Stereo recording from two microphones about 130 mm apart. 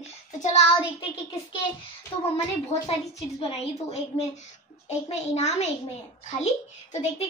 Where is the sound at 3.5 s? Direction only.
55° left (ahead or behind).